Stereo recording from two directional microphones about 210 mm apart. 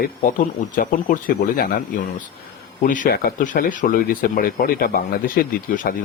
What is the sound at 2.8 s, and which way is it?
Speech, 40° left (ahead or behind).